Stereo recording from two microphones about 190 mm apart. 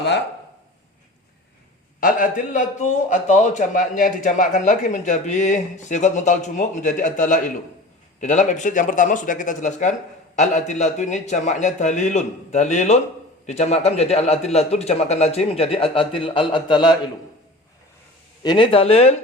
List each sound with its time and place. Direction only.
2.0 s a man's voice: 45° left (ahead or behind); by 17.0 s 25° left (ahead or behind)
18.4 s speech: 25° left (ahead or behind)